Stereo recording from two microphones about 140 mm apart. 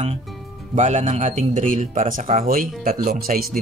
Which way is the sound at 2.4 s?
90° right.